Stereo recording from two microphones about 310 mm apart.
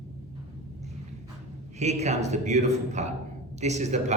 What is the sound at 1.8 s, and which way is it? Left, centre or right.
A man's voice, right.